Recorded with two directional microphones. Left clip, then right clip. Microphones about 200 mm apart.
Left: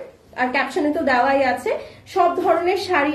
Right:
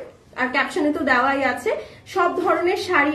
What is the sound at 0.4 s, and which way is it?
A woman's voice, 20° right (ahead or behind).